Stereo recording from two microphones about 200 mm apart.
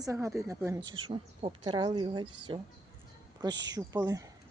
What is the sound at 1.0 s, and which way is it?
Speech, 25° right (ahead or behind).